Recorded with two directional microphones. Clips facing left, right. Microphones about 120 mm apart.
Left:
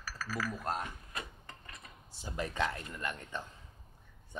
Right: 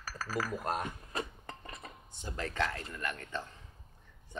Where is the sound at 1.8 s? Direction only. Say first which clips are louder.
Right 6 dB; 45° right (ahead or behind).